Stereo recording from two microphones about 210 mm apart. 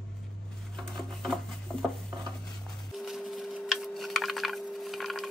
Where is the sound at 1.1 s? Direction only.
Centre (ahead or behind).